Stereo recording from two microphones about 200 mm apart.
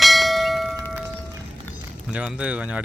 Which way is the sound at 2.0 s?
5° right (ahead or behind).